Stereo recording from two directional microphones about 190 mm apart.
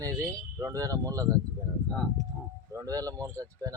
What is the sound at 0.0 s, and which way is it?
Speech, 20° right (ahead or behind).